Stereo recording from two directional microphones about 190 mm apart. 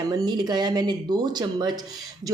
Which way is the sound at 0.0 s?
20° right (ahead or behind).